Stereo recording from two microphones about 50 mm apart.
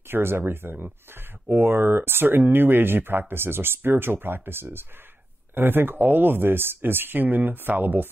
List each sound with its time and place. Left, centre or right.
0.1 s speech: right